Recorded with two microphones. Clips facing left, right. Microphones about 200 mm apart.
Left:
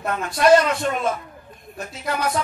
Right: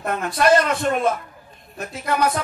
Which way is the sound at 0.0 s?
50° right (ahead or behind).